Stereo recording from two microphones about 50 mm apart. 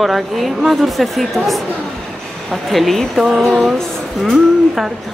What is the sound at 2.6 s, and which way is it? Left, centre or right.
Speech, centre.